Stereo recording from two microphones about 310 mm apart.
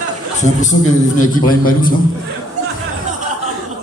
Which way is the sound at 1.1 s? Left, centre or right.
Left.